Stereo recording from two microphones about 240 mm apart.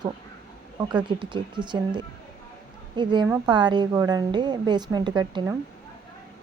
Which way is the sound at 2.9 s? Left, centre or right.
Centre.